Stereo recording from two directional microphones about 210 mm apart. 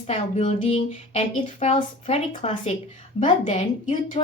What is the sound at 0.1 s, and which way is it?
A woman's voice, 30° left (ahead or behind).